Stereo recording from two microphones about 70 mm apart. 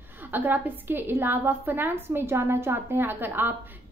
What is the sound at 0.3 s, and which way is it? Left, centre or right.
A woman's voice, right.